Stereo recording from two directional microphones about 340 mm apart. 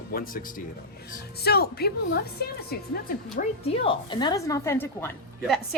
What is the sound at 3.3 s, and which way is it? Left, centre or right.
A woman's voice, centre.